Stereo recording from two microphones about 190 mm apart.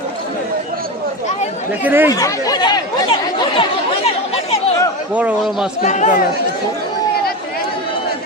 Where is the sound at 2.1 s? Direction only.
20° left (ahead or behind).